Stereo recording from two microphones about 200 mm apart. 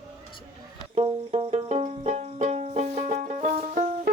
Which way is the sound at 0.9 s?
30° right (ahead or behind).